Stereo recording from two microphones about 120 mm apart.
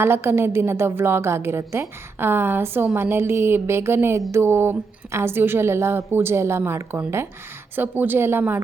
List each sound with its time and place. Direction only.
0.0 s a woman's voice: 20° right (ahead or behind)